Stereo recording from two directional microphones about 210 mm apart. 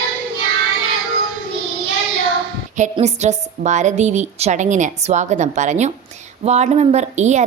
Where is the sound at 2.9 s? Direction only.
30° right (ahead or behind).